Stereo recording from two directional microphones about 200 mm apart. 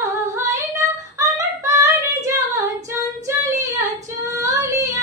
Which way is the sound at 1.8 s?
15° right (ahead or behind).